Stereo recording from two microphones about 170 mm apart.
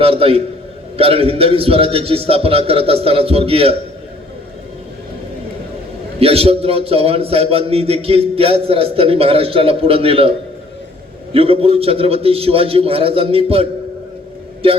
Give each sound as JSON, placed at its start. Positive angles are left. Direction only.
{"t": 0.0, "sound": "a man's voice", "side_deg": -35}
{"t": 6.1, "sound": "a man's voice", "side_deg": -35}
{"t": 11.3, "sound": "a man's voice", "side_deg": -35}